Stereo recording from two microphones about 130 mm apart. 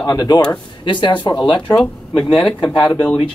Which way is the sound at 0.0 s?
30° left (ahead or behind).